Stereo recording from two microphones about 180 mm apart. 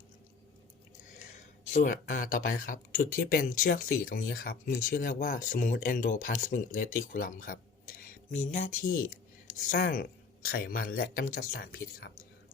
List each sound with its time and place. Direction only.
1.7 s speech: 50° left (ahead or behind)